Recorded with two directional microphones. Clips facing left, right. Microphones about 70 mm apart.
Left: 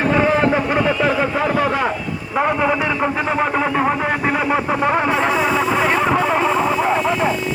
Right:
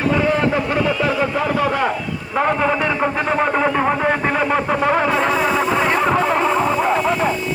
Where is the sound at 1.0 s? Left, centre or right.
Centre.